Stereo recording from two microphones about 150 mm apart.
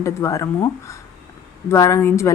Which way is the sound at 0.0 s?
20° left (ahead or behind).